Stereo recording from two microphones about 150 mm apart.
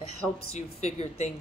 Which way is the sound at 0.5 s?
45° left (ahead or behind).